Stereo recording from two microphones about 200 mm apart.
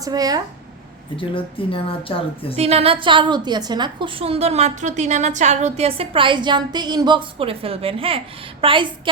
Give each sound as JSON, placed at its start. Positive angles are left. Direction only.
{"t": 0.0, "sound": "a woman's voice", "side_deg": -20}
{"t": 1.1, "sound": "a woman's voice", "side_deg": 25}
{"t": 2.6, "sound": "a woman's voice", "side_deg": -30}